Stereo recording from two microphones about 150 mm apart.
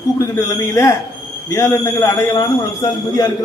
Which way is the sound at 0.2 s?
20° left (ahead or behind).